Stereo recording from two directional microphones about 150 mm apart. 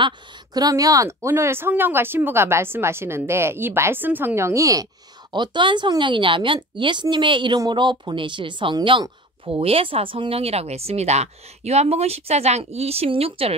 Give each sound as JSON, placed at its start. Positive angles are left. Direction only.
{"t": 0.0, "sound": "speech", "side_deg": -25}